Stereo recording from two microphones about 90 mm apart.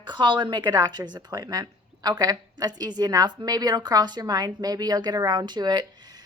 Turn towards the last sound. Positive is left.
turn(degrees=-50)  # may be behind; listen again after turning